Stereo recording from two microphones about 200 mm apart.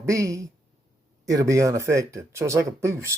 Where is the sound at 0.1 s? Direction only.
15° right (ahead or behind).